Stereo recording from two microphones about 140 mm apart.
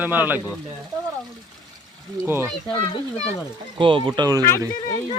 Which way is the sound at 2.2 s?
15° right (ahead or behind).